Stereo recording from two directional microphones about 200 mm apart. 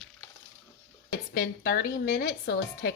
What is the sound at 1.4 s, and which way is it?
A woman's voice, 50° left (ahead or behind).